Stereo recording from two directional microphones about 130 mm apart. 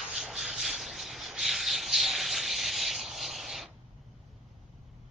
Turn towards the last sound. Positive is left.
turn(degrees=0)  # may be behind; listen again after turning